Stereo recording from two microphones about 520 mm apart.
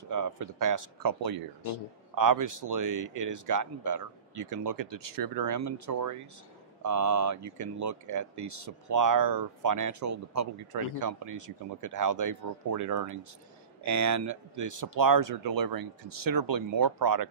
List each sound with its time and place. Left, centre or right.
0.1 s speech: right